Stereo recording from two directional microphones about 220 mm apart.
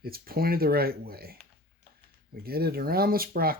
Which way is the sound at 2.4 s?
45° right (ahead or behind).